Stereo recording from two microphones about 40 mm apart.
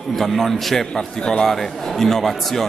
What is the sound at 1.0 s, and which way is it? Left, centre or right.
Speech, centre.